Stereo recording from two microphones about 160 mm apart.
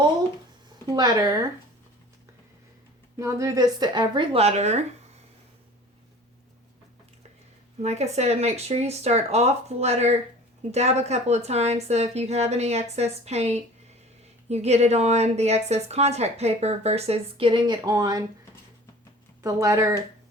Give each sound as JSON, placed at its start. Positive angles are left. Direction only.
{"t": 0.9, "sound": "speech", "side_deg": -25}
{"t": 3.2, "sound": "speech", "side_deg": -20}
{"t": 7.8, "sound": "a woman's voice", "side_deg": -45}
{"t": 19.4, "sound": "speech", "side_deg": -20}